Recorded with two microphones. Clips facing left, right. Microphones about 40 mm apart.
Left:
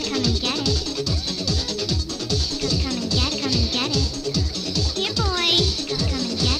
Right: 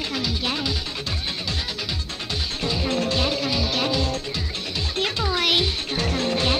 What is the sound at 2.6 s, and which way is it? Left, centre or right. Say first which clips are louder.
Music: right 1 dB; right.